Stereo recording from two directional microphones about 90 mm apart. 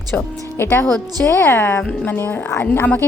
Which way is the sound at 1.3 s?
25° left (ahead or behind).